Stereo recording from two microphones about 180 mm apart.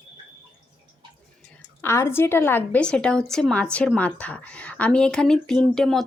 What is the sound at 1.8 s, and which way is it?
A woman's voice, 15° left (ahead or behind).